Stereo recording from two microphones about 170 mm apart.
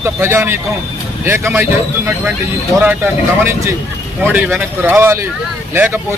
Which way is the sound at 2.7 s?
15° right (ahead or behind).